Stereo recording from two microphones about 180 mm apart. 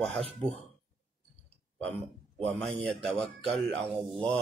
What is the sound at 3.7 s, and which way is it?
Speech, 5° left (ahead or behind).